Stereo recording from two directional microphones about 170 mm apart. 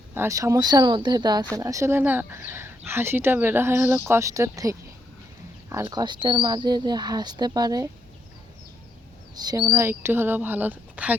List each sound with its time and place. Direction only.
0.1 s speech: 15° right (ahead or behind)
9.3 s speech: 25° right (ahead or behind)